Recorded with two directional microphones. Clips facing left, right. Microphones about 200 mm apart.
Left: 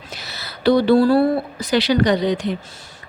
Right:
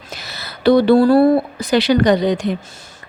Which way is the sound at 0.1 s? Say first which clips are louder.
Right 3 dB; 50° right (ahead or behind).